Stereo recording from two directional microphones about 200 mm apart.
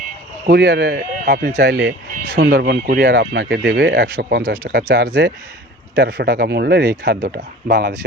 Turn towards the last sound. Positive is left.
turn(degrees=-50)  # may be behind; listen again after turning